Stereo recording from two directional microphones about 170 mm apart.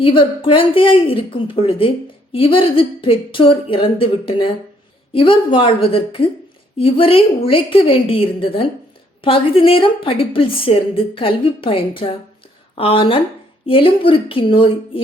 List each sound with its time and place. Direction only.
0.0 s a woman's voice: 30° left (ahead or behind)